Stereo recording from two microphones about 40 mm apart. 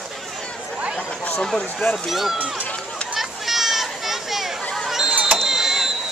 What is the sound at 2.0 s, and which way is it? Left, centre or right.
Speech, centre.